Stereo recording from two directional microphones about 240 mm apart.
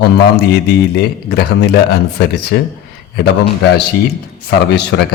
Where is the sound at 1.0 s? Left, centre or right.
Left.